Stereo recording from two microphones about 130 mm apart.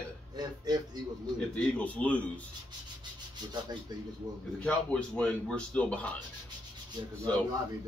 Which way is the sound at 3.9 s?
30° right (ahead or behind).